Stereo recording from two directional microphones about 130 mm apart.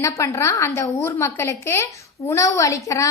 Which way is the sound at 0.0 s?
20° left (ahead or behind).